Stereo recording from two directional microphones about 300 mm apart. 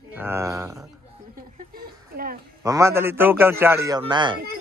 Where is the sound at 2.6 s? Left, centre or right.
Centre.